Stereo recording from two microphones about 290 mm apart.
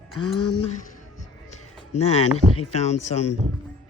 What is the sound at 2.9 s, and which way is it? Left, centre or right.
Speech, left.